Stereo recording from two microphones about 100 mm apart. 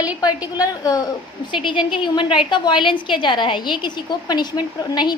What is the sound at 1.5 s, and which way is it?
Speech, 55° left (ahead or behind).